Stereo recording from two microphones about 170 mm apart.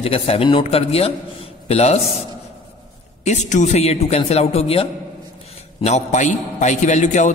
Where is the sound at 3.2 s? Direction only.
45° left (ahead or behind).